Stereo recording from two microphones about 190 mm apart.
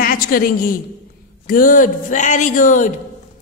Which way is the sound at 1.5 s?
45° left (ahead or behind).